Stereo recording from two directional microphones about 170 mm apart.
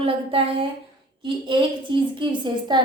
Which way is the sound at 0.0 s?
35° right (ahead or behind).